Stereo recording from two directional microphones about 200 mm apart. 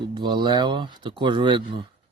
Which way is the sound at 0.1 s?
20° right (ahead or behind).